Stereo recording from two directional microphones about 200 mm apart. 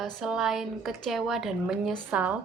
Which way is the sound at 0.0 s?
Centre (ahead or behind).